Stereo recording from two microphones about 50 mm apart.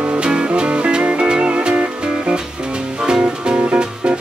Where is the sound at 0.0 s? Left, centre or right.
Right.